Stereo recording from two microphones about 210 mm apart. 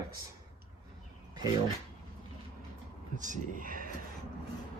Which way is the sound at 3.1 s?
35° right (ahead or behind).